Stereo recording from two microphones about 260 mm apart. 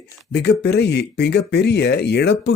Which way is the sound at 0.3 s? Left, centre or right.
Left.